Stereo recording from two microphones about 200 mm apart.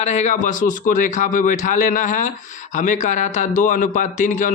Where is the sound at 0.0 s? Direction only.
35° left (ahead or behind).